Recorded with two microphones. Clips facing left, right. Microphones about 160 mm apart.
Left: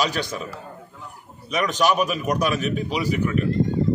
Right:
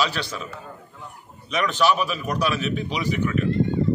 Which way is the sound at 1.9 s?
45° left (ahead or behind).